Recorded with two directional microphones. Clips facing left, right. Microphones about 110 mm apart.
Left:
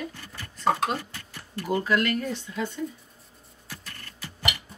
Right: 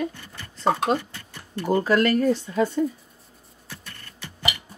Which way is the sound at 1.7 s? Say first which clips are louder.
Right 5 dB; 40° right (ahead or behind).